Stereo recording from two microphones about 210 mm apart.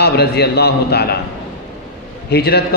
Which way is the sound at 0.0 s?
50° left (ahead or behind).